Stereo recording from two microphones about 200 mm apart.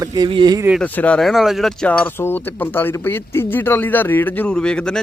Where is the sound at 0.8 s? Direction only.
5° left (ahead or behind).